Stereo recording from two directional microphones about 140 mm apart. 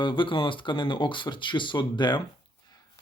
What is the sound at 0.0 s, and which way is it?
Speech, 35° left (ahead or behind).